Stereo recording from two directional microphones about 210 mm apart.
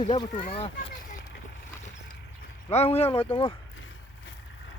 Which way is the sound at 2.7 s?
30° left (ahead or behind).